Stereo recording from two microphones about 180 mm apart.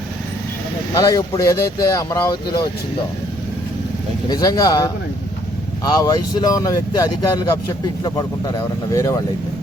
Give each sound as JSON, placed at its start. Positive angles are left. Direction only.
{"t": 0.9, "sound": "speech", "side_deg": 20}
{"t": 4.3, "sound": "speech", "side_deg": 20}